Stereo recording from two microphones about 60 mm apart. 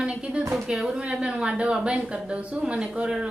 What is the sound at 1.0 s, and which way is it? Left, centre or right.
Speech, centre.